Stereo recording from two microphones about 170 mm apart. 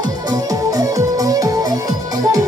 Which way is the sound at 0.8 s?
20° right (ahead or behind).